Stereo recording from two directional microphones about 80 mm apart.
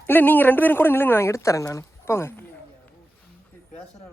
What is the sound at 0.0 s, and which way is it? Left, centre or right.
Speech, left.